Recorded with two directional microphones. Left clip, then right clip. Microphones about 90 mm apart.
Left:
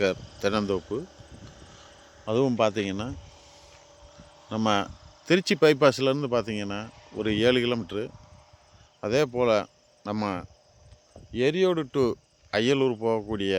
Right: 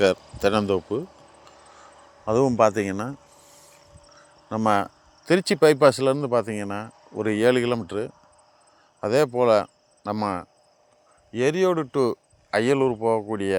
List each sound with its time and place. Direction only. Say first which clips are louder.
0.3 s a sound: right 5 dB; centre (ahead or behind)
2.3 s speech: right 5 dB; 10° right (ahead or behind)
4.4 s speech: right 4 dB; 5° left (ahead or behind)
5.2 s speech: right 3 dB; 25° left (ahead or behind)
6.6 s speech: right 3 dB; 10° left (ahead or behind)
9.6 s cricket: right 4 dB; 25° left (ahead or behind)
11.3 s speech: right 2 dB; 15° left (ahead or behind)
12.9 s speech: right 4 dB; 30° left (ahead or behind)